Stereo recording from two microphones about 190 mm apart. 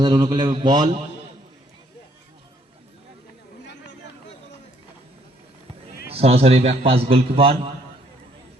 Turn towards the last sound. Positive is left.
turn(degrees=-30)  # may be behind; listen again after turning